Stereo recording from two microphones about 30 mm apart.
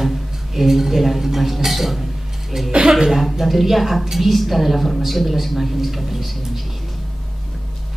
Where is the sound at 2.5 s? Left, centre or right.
Centre.